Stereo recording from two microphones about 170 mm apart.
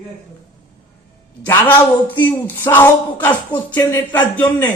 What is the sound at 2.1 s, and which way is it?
A woman's voice, 10° left (ahead or behind).